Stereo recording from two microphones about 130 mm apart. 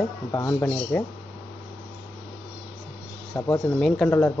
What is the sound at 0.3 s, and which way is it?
Speech, 20° left (ahead or behind).